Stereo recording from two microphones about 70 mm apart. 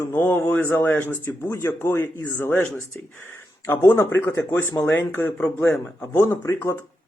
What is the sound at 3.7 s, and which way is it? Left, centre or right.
Speech, left.